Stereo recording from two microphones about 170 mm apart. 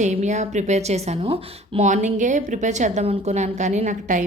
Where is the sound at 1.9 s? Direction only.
45° right (ahead or behind).